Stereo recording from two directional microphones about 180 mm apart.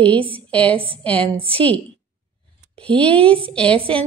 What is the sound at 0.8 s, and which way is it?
Speech, 30° right (ahead or behind).